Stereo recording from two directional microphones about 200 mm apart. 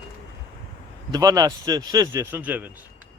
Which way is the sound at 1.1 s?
20° right (ahead or behind).